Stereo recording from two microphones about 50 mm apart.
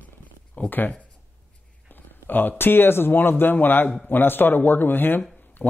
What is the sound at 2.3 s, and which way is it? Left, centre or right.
Speech, left.